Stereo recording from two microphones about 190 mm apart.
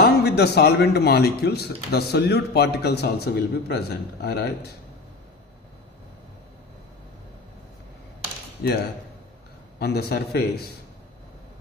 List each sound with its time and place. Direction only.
0.0 s speech: 60° left (ahead or behind)
9.7 s speech: 55° left (ahead or behind)